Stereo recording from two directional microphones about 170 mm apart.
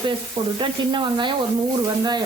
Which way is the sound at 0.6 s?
25° right (ahead or behind).